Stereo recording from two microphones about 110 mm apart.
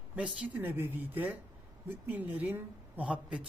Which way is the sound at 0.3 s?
15° right (ahead or behind).